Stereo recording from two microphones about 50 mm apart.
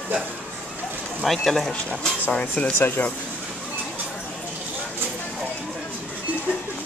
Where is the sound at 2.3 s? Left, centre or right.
Left.